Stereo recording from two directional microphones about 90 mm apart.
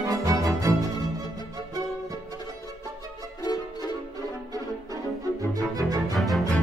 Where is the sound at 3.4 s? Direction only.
50° left (ahead or behind).